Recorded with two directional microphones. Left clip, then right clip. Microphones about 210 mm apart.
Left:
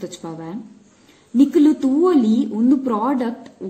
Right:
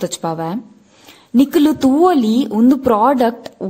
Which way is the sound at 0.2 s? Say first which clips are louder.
Right 10 dB; 55° right (ahead or behind).